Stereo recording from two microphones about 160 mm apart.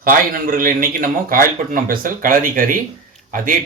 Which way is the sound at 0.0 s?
60° right (ahead or behind).